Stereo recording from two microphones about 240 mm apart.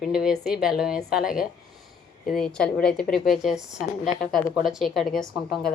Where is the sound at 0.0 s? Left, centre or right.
Centre.